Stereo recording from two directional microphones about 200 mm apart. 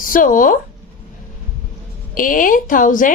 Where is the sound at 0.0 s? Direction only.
45° left (ahead or behind).